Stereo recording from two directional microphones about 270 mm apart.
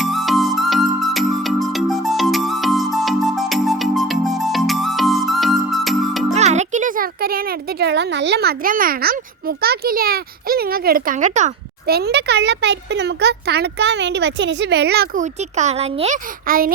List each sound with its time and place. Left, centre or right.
0.0 s music: centre
6.3 s a child's voice: right